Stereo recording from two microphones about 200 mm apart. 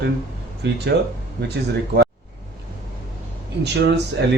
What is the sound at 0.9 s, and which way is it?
Speech, 60° right (ahead or behind).